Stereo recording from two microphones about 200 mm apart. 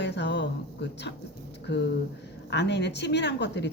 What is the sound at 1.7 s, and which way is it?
A man's voice, 60° left (ahead or behind).